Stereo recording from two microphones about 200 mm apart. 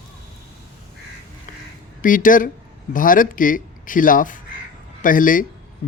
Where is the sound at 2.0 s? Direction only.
40° left (ahead or behind).